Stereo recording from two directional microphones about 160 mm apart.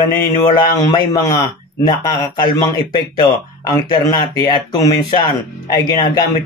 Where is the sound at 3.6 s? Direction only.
20° left (ahead or behind).